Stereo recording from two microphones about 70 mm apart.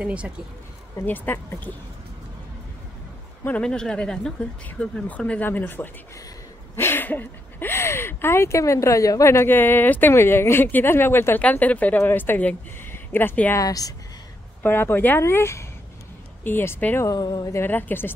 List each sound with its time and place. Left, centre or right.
0.0 s speech: centre
1.0 s speech: left
3.6 s speech: centre; by 5.9 s left
6.7 s a sound: left
7.7 s speech: left
11.4 s speech: left
13.6 s speech: left
14.6 s speech: left
17.0 s speech: left
17.6 s speech: left